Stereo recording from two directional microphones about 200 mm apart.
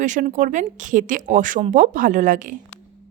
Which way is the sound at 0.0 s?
40° right (ahead or behind).